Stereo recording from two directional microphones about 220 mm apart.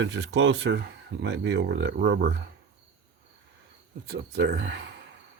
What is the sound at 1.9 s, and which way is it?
Speech, 45° right (ahead or behind).